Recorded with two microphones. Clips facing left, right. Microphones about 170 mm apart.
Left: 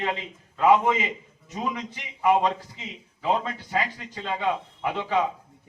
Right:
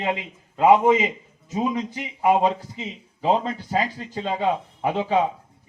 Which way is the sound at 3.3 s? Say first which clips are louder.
Right 4 dB; 25° right (ahead or behind).